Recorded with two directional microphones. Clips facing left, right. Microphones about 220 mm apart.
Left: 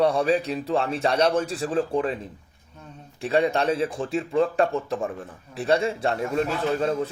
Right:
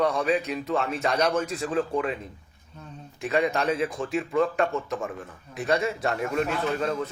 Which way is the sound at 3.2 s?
30° left (ahead or behind).